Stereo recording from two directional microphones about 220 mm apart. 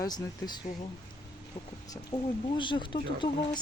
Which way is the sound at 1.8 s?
15° left (ahead or behind).